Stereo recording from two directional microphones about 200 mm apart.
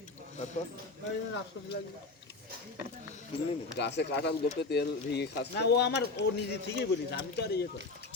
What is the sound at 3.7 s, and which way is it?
Speech, 60° left (ahead or behind).